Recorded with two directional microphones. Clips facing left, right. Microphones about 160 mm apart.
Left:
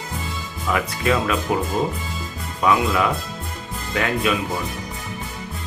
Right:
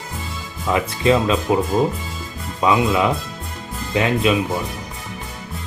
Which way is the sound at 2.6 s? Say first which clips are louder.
Right 2 dB; 20° right (ahead or behind).